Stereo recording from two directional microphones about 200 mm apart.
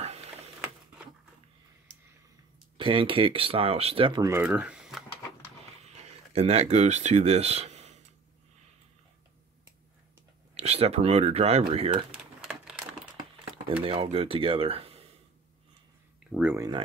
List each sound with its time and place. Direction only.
0.0 s a sound: 30° right (ahead or behind)
2.8 s speech: 25° right (ahead or behind); by 5.0 s 5° right (ahead or behind)
5.8 s a sound: 35° right (ahead or behind)
10.5 s speech: 30° right (ahead or behind)
12.1 s typewriter: 5° right (ahead or behind)
13.8 s speech: 30° right (ahead or behind)
16.3 s speech: 5° right (ahead or behind)